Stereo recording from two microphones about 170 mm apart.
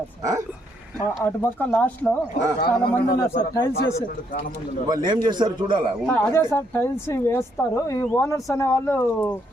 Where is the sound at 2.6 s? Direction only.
65° left (ahead or behind).